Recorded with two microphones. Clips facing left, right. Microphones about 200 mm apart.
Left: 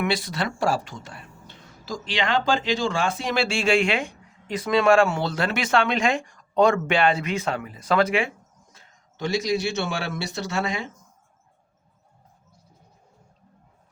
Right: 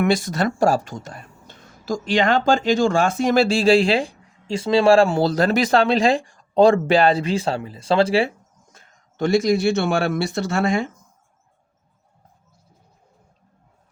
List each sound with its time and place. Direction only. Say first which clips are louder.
0.0 s speech: right 6 dB; 45° right (ahead or behind)
8.7 s speech: right 2 dB; 50° right (ahead or behind)